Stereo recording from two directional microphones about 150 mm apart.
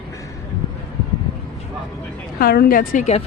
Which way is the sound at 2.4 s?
80° left.